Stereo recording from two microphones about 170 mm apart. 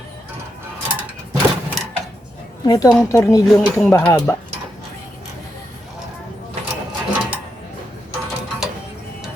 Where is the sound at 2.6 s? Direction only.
25° left (ahead or behind).